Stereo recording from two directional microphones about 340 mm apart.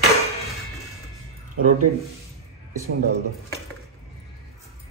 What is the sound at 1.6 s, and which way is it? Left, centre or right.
Speech, right.